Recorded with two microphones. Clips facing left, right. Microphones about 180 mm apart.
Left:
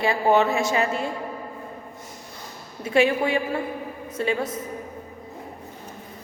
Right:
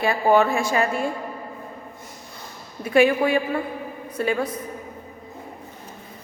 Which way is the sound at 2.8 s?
25° left (ahead or behind).